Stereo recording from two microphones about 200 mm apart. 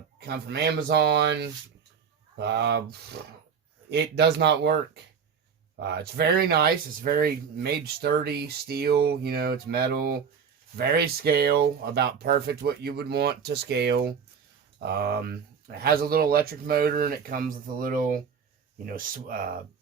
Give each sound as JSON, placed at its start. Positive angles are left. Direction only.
{"t": 0.3, "sound": "speech", "side_deg": -55}
{"t": 3.8, "sound": "speech", "side_deg": -60}
{"t": 5.8, "sound": "speech", "side_deg": -55}